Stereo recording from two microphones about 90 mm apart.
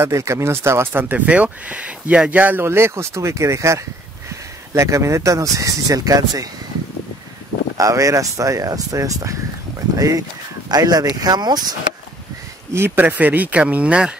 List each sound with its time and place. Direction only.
0.0 s speech: 30° right (ahead or behind)
7.7 s speech: 40° right (ahead or behind)
12.7 s speech: 25° right (ahead or behind)